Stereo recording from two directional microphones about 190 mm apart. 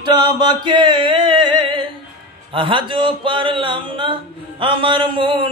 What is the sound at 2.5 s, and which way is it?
Music, 25° right (ahead or behind).